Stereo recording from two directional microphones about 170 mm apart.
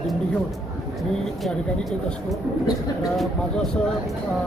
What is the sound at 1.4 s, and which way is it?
Speech, centre (ahead or behind).